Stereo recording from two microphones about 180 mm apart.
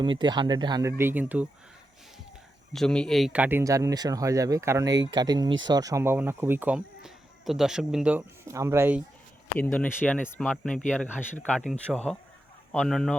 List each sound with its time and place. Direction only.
0.0 s speech: 25° right (ahead or behind); by 1.5 s 10° right (ahead or behind)
2.7 s speech: 5° left (ahead or behind)
8.4 s speech: 15° right (ahead or behind)
9.6 s a man's voice: 10° left (ahead or behind)